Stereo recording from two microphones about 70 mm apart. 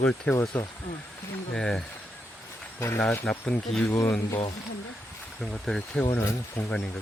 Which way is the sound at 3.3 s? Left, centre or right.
Centre.